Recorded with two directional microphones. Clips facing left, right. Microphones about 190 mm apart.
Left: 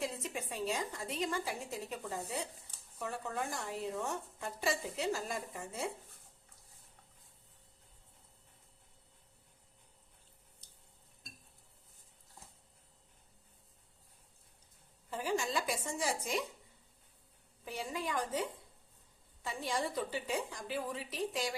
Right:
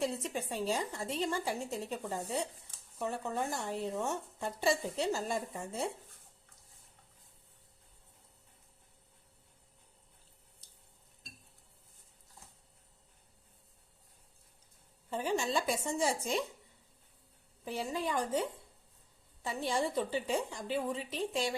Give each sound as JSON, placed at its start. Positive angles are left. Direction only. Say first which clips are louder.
{"t": 0.2, "sound": "speech", "louder": "right 3 dB", "side_deg": -30}
{"t": 15.1, "sound": "speech", "louder": "right 3 dB", "side_deg": -25}
{"t": 17.7, "sound": "speech", "louder": "right 4 dB", "side_deg": -30}
{"t": 19.5, "sound": "speech", "louder": "right 4 dB", "side_deg": -30}